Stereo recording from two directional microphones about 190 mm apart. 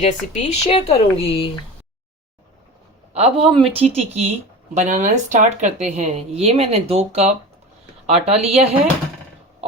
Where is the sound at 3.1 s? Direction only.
30° right (ahead or behind).